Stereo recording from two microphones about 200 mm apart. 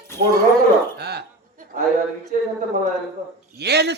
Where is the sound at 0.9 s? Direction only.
55° right (ahead or behind).